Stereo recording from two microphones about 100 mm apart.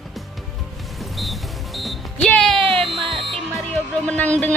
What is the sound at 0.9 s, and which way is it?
Music, centre (ahead or behind).